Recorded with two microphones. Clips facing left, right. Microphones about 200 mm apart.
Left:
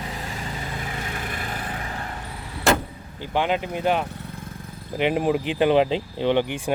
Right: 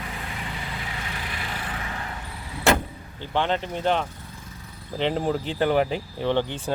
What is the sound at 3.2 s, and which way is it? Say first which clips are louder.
Speech: left 2 dB; 10° left (ahead or behind).